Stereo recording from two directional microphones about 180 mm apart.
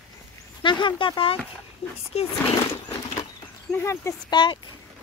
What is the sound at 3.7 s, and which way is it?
Speech, 15° left (ahead or behind).